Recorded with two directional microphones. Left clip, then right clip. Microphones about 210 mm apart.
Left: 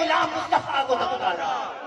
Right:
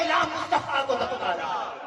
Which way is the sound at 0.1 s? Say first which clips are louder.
Left 2 dB; 25° right (ahead or behind).